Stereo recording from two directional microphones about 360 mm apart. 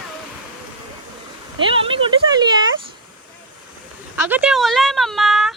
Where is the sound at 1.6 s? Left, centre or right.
Centre.